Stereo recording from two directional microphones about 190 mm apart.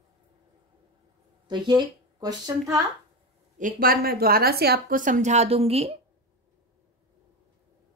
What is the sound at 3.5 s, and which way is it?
A woman's voice, 45° right (ahead or behind).